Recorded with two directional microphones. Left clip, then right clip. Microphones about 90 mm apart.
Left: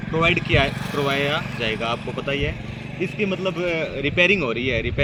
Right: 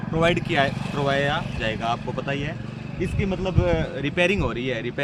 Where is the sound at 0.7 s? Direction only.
80° left.